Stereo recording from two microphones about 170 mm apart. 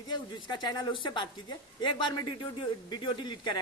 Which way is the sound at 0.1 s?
25° left (ahead or behind).